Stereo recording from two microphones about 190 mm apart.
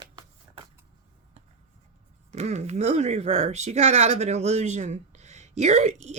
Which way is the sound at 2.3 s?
35° right (ahead or behind).